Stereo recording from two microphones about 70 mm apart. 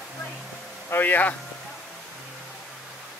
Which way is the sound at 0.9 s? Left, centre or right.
Left.